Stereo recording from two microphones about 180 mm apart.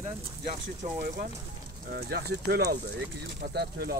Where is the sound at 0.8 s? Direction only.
45° right (ahead or behind).